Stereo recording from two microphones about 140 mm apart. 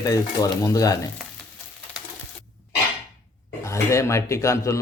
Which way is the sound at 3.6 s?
20° left (ahead or behind).